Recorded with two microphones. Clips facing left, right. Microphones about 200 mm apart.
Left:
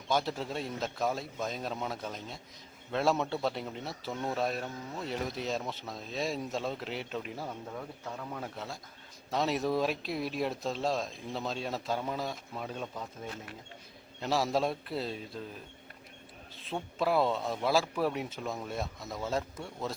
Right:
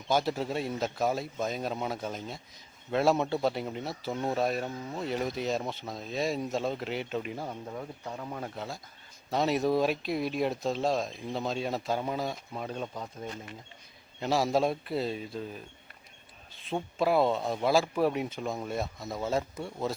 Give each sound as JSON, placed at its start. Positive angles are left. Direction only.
{"t": 0.1, "sound": "speech", "side_deg": -5}
{"t": 4.1, "sound": "a man's voice", "side_deg": -15}
{"t": 4.4, "sound": "speech", "side_deg": 0}
{"t": 7.4, "sound": "a man's voice", "side_deg": -15}
{"t": 8.4, "sound": "speech", "side_deg": 0}
{"t": 17.0, "sound": "speech", "side_deg": 0}